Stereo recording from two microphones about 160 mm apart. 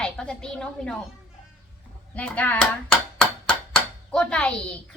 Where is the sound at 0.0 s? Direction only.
5° left (ahead or behind).